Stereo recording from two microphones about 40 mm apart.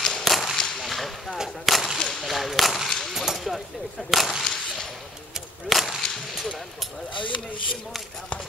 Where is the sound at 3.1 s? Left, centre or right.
Centre.